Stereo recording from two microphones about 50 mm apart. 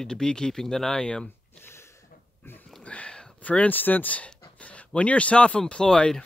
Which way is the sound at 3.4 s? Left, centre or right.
Left.